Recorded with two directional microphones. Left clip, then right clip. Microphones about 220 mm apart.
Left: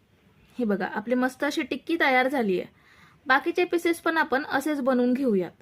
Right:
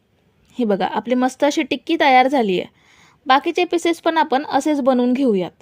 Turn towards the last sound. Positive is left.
turn(degrees=-25)  # may be behind; listen again after turning